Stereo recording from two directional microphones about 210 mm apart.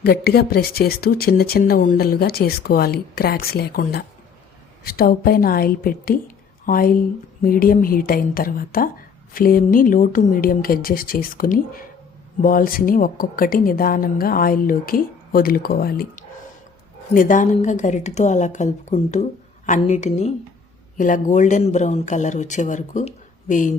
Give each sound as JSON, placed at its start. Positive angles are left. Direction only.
{"t": 0.0, "sound": "speech", "side_deg": 50}
{"t": 17.2, "sound": "a woman's voice", "side_deg": 40}